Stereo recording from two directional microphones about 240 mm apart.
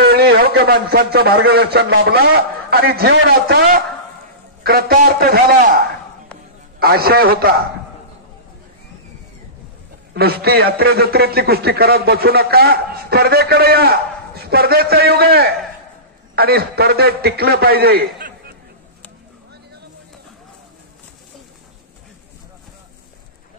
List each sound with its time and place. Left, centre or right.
0.0 s a man's voice: right
10.1 s a man's voice: right